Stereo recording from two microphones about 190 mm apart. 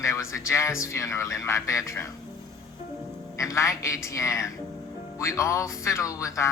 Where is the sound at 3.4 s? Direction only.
15° left (ahead or behind).